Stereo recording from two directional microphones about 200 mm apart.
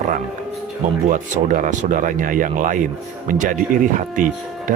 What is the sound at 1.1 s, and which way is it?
Speech, 40° right (ahead or behind).